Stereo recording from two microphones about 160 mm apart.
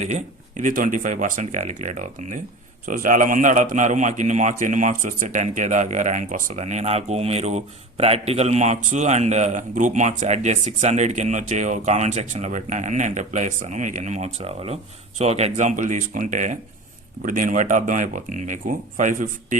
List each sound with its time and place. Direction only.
0.0 s a man's voice: 50° right (ahead or behind)